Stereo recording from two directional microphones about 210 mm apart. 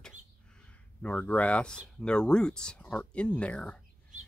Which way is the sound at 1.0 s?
5° left (ahead or behind).